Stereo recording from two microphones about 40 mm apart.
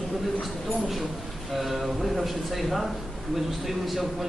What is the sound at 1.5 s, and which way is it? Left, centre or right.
A man's voice, centre.